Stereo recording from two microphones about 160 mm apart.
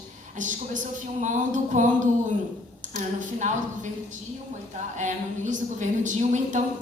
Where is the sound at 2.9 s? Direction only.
50° right (ahead or behind).